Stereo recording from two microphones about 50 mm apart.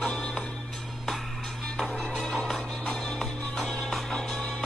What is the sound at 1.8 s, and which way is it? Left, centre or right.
Music, centre.